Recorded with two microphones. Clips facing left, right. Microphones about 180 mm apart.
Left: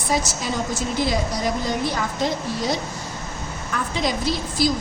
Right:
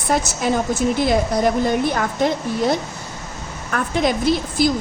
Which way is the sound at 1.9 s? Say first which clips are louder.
Right 4 dB; 55° right (ahead or behind).